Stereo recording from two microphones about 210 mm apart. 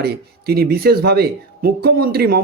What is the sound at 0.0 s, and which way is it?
Speech, 50° right (ahead or behind).